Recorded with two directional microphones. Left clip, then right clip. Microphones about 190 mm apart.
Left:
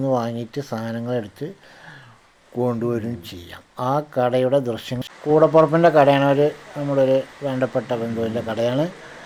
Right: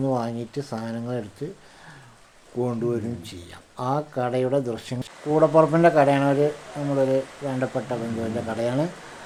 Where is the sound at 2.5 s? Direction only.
20° left (ahead or behind).